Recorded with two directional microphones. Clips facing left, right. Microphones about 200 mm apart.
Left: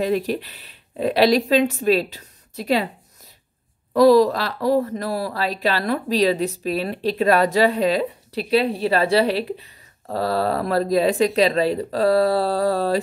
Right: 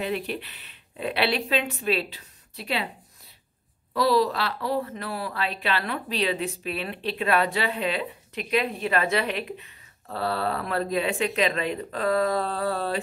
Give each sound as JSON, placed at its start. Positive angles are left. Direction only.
{"t": 0.0, "sound": "speech", "side_deg": 40}
{"t": 3.9, "sound": "speech", "side_deg": 45}